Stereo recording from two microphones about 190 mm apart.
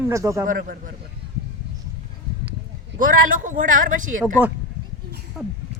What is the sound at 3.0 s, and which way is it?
Speech, 45° right (ahead or behind).